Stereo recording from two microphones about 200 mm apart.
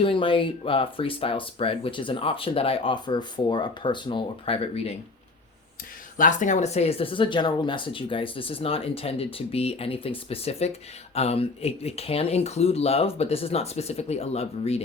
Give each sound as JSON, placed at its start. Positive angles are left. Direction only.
{"t": 0.0, "sound": "speech", "side_deg": 25}
{"t": 6.1, "sound": "speech", "side_deg": 40}